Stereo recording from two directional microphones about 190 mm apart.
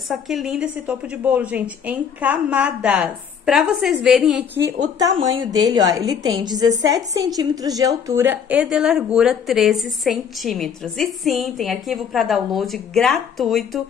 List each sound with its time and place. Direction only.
0.1 s a woman's voice: centre (ahead or behind)
5.3 s a woman's voice: 20° right (ahead or behind); by 13.8 s centre (ahead or behind)